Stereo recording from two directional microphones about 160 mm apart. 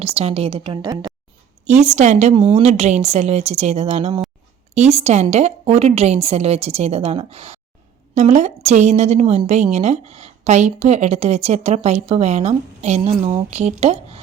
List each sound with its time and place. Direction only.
0.0 s a woman's voice: 40° right (ahead or behind)
1.8 s a woman's voice: 45° right (ahead or behind)